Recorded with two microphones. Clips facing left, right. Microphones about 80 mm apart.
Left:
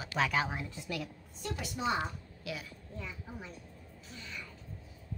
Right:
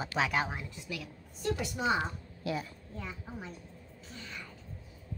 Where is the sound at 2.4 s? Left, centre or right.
Right.